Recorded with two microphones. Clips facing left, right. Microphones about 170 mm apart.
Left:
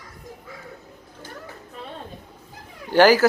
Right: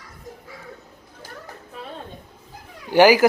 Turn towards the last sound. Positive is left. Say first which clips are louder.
# right 1 dB
turn(degrees=-10)  # may be behind; listen again after turning